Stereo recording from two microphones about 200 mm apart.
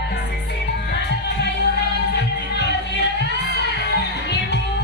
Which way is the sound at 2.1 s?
60° left (ahead or behind).